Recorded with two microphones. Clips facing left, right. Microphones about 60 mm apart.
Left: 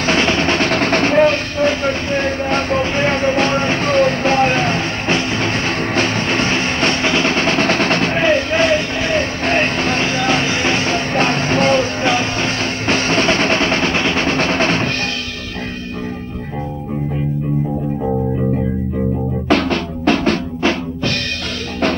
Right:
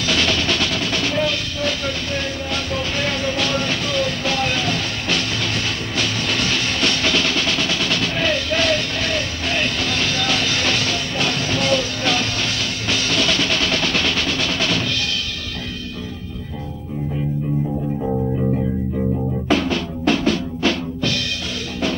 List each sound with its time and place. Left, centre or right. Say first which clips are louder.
0.0 s music: left 5 dB; left
19.5 s music: left 4 dB; left
20.6 s drum kit: left 2 dB; left